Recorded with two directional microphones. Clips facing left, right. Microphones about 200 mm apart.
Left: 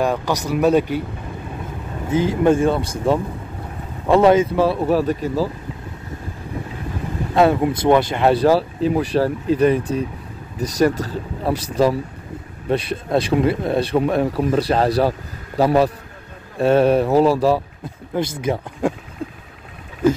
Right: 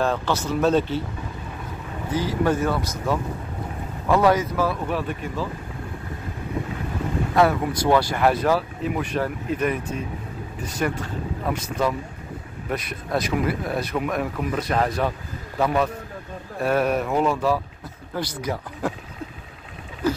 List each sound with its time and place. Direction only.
0.0 s speech: 15° left (ahead or behind)
2.0 s speech: 25° left (ahead or behind)
7.3 s speech: 25° left (ahead or behind)